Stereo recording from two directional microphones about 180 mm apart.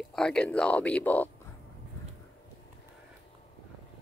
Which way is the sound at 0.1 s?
5° left (ahead or behind).